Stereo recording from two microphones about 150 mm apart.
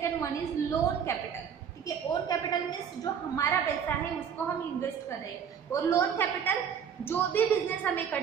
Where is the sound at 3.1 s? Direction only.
20° left (ahead or behind).